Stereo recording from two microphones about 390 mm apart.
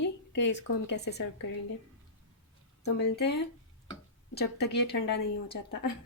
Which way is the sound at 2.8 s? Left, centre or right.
Left.